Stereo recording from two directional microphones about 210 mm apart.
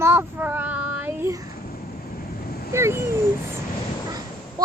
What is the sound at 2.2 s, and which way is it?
Vehicle, 45° left (ahead or behind).